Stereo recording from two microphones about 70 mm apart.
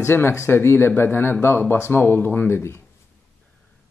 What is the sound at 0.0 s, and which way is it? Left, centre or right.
Speech, left.